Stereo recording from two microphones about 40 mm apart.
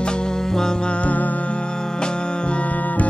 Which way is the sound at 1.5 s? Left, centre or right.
Left.